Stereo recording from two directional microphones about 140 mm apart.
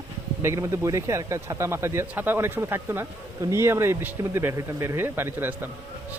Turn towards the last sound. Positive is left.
turn(degrees=-15)  # may be behind; listen again after turning